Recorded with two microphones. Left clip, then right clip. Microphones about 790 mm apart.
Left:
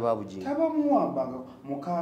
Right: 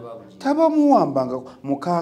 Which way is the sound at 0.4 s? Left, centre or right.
Right.